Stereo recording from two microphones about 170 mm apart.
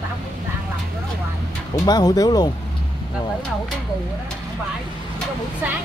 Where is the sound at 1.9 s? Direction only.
20° left (ahead or behind).